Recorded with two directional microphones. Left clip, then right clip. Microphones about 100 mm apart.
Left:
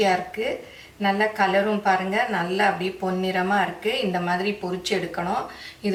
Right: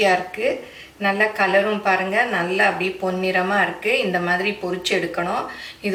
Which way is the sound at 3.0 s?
15° right (ahead or behind).